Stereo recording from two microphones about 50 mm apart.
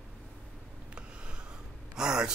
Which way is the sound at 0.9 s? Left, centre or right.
Right.